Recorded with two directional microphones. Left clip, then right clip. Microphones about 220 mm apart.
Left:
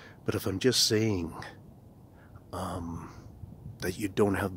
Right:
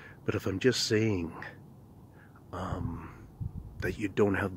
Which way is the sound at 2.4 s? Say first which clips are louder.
Left 1 dB; 15° left (ahead or behind).